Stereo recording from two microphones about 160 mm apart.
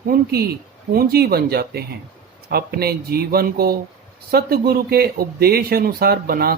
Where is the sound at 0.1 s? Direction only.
75° right (ahead or behind).